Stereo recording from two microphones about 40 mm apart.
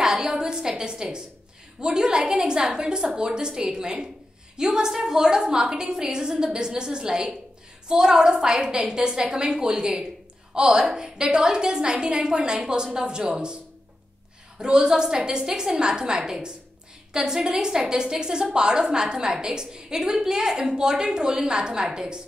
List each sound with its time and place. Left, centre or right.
0.0 s a sound: centre
1.8 s a woman's voice: right
14.6 s a woman's voice: centre